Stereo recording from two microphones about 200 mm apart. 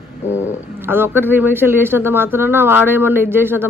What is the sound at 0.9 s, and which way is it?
A woman's voice, 10° right (ahead or behind).